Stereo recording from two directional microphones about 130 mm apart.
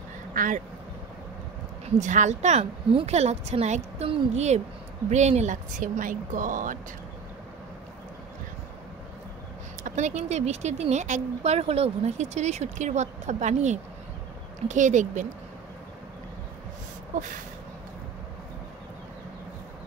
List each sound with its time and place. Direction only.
0.3 s quack: 90° right
2.0 s speech: 70° right (ahead or behind)
2.9 s speech: 50° right (ahead or behind); by 6.8 s 85° right
9.8 s speech: 65° right (ahead or behind)